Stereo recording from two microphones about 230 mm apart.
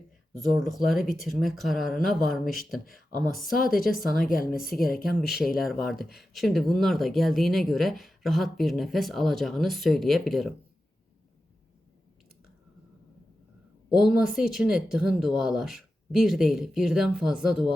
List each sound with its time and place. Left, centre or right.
0.3 s speech: centre
3.9 s a woman's voice: left
5.0 s speech: centre
13.9 s speech: centre